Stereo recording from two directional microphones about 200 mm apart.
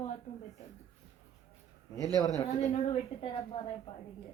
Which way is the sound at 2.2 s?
20° left (ahead or behind).